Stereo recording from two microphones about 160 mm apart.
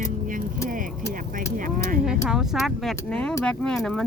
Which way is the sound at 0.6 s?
60° right (ahead or behind).